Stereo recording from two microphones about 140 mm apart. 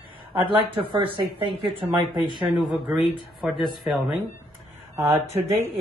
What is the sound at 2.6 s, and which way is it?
Speech, centre (ahead or behind).